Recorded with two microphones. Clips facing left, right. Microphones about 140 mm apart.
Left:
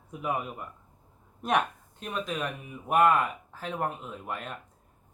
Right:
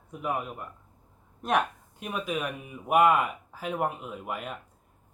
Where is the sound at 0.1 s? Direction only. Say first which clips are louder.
Even; centre (ahead or behind).